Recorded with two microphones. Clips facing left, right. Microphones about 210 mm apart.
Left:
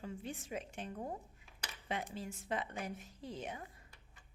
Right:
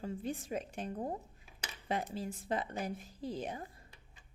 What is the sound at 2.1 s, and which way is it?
Speech, 35° right (ahead or behind).